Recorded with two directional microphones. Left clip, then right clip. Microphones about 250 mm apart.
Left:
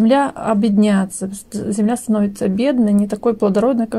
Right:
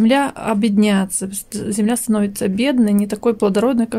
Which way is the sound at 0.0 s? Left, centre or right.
Centre.